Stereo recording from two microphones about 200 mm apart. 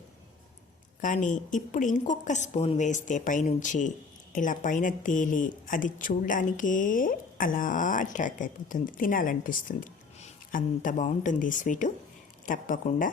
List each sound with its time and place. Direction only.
1.0 s a woman's voice: 40° left (ahead or behind)